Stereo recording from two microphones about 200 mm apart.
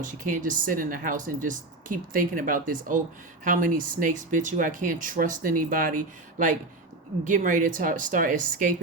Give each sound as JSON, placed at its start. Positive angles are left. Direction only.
{"t": 0.0, "sound": "speech", "side_deg": -40}